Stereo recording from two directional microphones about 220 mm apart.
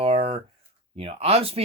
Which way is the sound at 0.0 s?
25° right (ahead or behind).